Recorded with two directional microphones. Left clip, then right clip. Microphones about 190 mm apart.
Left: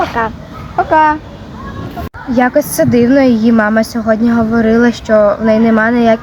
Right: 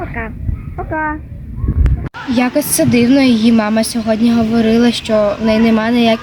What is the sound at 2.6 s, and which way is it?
Speech, 10° left (ahead or behind).